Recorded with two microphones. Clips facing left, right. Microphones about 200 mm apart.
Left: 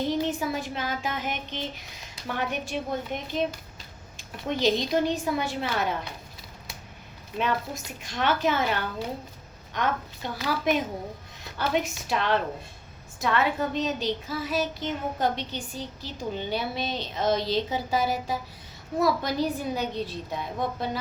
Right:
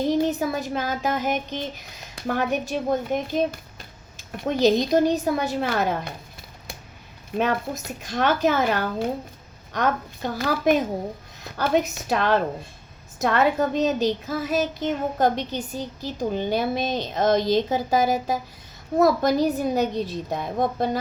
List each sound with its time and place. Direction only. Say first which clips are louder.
0.2 s a child's voice: right 5 dB; 40° right (ahead or behind)
7.3 s a child's voice: right 4 dB; 50° right (ahead or behind)